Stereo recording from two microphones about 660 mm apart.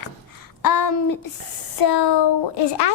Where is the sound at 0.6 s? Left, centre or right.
Left.